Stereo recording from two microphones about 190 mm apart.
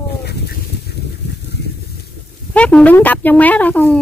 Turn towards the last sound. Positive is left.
turn(degrees=10)  # may be behind; listen again after turning